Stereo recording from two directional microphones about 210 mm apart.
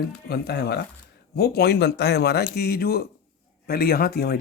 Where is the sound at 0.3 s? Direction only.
50° left (ahead or behind).